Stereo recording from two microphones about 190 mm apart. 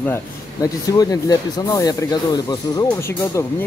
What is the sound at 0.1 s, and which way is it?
Speech, 20° left (ahead or behind).